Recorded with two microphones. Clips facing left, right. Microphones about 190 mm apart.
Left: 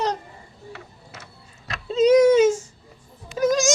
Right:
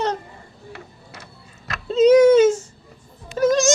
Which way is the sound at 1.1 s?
35° right (ahead or behind).